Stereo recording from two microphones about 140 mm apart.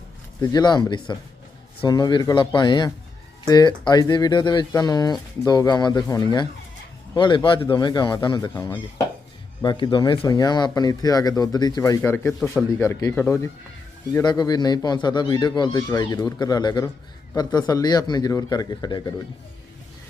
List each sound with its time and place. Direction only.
0.4 s a man's voice: 30° left (ahead or behind)
14.1 s speech: 30° left (ahead or behind)